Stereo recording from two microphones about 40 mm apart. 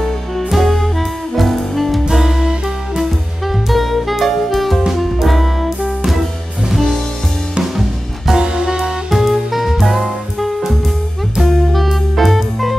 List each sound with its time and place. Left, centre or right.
0.5 s music: centre
2.2 s music: centre
8.4 s music: centre
9.1 s music: centre
11.4 s music: centre
11.8 s music: centre